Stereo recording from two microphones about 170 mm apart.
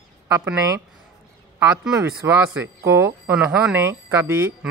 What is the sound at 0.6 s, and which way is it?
Speech, 20° right (ahead or behind).